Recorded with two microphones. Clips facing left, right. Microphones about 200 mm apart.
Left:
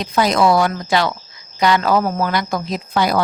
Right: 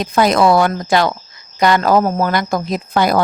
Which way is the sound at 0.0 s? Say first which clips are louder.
Right 3 dB; 50° right (ahead or behind).